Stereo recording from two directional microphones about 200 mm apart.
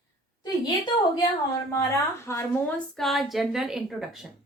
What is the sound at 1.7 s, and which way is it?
Speech, 15° left (ahead or behind).